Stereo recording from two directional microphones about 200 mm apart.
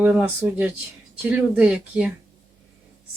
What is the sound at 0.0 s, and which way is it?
Speech, 10° right (ahead or behind).